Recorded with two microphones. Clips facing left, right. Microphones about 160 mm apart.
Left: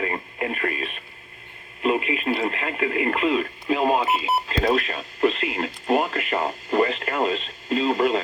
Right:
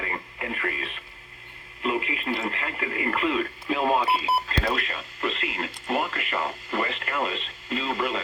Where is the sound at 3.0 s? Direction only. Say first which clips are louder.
Even; 25° left (ahead or behind).